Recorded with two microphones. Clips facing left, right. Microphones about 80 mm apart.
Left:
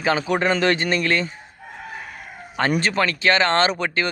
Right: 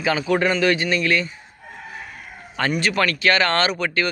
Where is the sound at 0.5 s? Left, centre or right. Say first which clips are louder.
Even; left.